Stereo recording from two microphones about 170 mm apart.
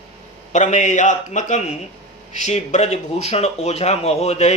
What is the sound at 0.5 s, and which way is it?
Speech, 45° left (ahead or behind).